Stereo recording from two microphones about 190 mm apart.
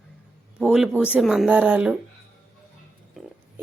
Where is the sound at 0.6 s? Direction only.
5° right (ahead or behind).